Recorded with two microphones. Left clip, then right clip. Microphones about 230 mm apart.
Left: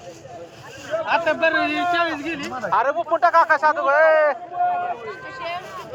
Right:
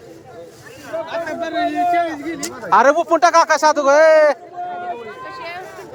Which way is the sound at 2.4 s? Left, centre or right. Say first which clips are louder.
Right 8 dB; right.